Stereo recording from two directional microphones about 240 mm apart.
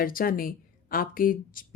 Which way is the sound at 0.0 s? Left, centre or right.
Left.